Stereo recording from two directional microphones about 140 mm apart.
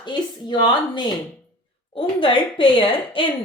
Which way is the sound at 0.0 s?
30° left (ahead or behind).